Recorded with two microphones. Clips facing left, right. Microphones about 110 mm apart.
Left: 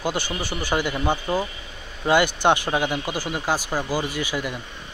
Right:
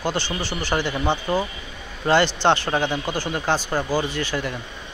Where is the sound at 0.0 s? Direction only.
10° left (ahead or behind).